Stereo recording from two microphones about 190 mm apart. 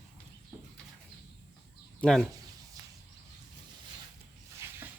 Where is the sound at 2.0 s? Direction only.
5° left (ahead or behind).